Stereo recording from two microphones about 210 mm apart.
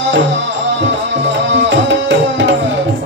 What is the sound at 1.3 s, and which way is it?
Tabla, 60° right (ahead or behind).